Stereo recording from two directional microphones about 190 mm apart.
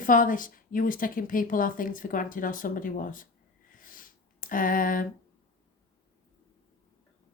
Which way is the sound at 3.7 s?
45° left (ahead or behind).